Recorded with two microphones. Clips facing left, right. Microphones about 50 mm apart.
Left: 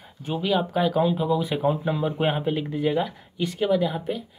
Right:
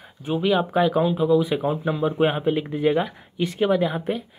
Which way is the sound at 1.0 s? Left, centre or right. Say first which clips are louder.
Right 4 dB; centre.